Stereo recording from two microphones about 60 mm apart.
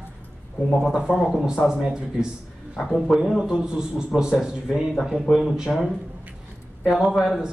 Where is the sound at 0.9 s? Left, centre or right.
Centre.